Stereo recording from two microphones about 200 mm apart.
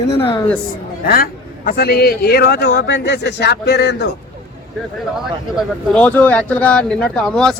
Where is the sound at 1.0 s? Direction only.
50° left (ahead or behind).